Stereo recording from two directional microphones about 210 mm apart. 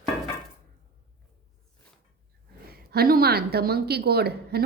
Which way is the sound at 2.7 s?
45° right (ahead or behind).